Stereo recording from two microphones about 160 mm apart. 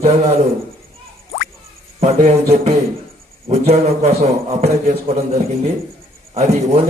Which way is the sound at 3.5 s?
45° right (ahead or behind).